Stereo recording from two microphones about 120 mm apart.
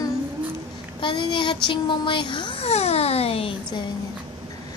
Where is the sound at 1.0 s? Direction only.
45° left (ahead or behind).